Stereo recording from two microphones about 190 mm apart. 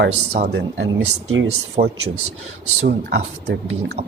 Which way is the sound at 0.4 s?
65° right (ahead or behind).